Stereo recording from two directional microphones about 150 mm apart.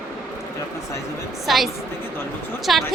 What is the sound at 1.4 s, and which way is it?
A woman's voice, centre (ahead or behind).